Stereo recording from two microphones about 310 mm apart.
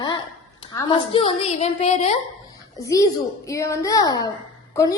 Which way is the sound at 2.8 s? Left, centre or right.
Centre.